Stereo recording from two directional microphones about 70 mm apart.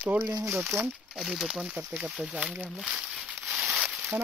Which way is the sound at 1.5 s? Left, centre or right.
Centre.